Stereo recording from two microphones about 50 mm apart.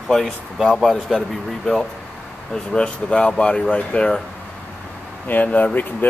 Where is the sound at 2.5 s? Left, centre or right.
Centre.